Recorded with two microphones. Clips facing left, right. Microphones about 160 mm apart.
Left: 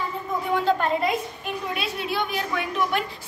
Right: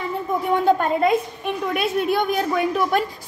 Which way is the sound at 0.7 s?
50° right (ahead or behind).